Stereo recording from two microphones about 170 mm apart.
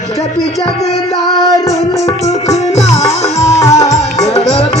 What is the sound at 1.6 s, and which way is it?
Music, 20° left (ahead or behind).